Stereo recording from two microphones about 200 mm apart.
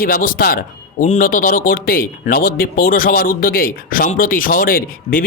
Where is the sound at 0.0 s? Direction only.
45° left (ahead or behind).